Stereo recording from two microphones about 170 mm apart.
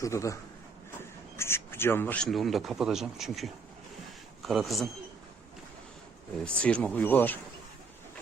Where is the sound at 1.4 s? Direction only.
15° left (ahead or behind).